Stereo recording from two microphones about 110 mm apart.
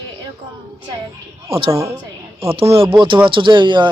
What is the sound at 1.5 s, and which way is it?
Speech, 60° right (ahead or behind).